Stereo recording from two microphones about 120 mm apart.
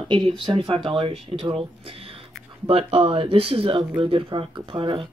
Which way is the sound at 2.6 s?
50° right (ahead or behind).